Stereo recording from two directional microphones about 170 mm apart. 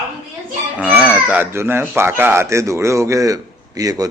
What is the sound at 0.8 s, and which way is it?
A man's voice, 10° right (ahead or behind).